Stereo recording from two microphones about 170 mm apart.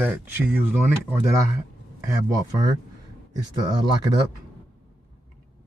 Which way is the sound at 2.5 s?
25° right (ahead or behind).